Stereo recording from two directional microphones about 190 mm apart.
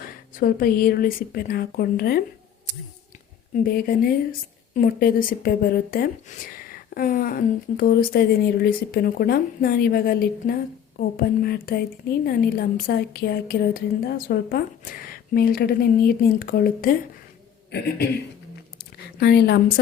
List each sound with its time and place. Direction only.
0.0 s a woman's voice: 50° left (ahead or behind)
3.5 s a woman's voice: 50° left (ahead or behind)
19.2 s a woman's voice: 60° left (ahead or behind)